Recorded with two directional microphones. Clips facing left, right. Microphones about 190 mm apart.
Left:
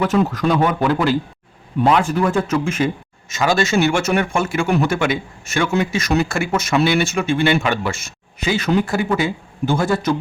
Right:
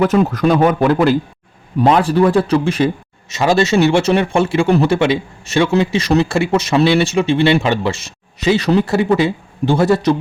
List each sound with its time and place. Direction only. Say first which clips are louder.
0.0 s speech: right 4 dB; 45° right (ahead or behind)
1.8 s speech: right 4 dB; 35° right (ahead or behind)